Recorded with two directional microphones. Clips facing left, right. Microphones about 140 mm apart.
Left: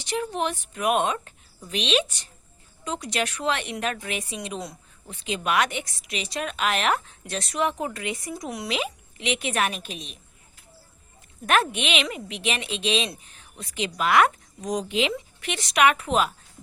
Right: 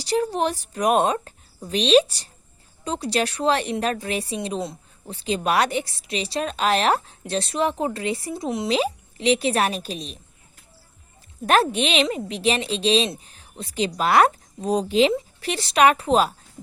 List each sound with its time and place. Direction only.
0.0 s speech: 35° right (ahead or behind)
11.4 s speech: 35° right (ahead or behind)